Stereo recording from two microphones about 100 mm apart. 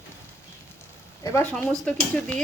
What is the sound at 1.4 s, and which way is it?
Speech, 20° left (ahead or behind).